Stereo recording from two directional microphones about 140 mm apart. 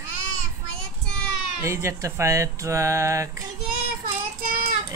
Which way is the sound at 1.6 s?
20° right (ahead or behind).